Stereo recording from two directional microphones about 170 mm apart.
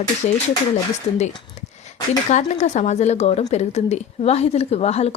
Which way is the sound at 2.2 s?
45° left (ahead or behind).